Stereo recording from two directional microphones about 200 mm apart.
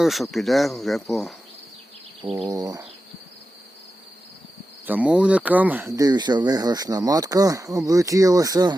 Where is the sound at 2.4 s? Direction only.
20° right (ahead or behind).